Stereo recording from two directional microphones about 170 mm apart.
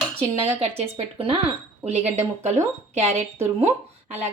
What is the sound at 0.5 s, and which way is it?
A woman's voice, 35° right (ahead or behind).